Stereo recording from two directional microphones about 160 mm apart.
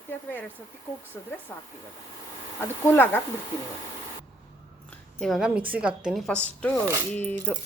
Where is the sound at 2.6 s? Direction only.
15° left (ahead or behind).